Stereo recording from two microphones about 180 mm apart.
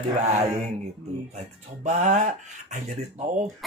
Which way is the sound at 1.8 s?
40° right (ahead or behind).